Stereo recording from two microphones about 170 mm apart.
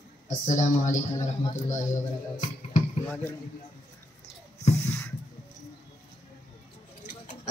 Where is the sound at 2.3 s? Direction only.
45° left (ahead or behind).